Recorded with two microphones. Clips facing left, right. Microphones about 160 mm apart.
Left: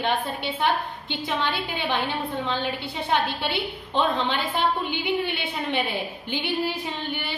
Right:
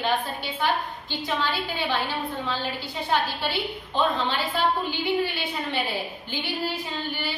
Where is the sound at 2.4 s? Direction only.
20° left (ahead or behind).